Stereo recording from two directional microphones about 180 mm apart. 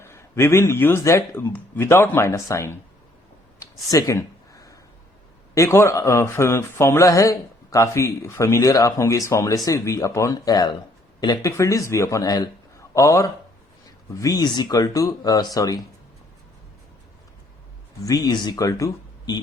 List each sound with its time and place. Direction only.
0.0 s speech: 15° left (ahead or behind)
3.6 s a sound: 20° left (ahead or behind)
5.5 s speech: 15° left (ahead or behind)
18.0 s speech: 20° left (ahead or behind)